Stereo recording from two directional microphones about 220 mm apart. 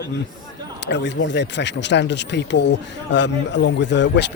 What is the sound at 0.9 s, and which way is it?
Speech, 55° left (ahead or behind).